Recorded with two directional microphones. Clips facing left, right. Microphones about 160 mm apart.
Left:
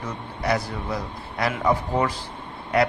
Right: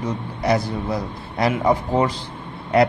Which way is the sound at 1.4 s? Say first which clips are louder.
Right 4 dB; 25° right (ahead or behind).